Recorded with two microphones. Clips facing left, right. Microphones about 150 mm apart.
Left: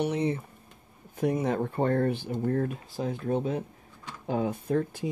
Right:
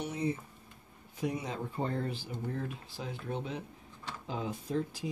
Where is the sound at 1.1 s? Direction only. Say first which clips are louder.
Left 9 dB; 55° left (ahead or behind).